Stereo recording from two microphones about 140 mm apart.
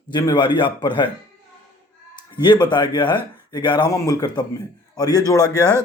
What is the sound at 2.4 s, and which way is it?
A man's voice, 30° left (ahead or behind).